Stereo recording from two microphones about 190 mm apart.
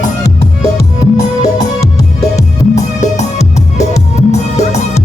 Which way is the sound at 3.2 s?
35° left (ahead or behind).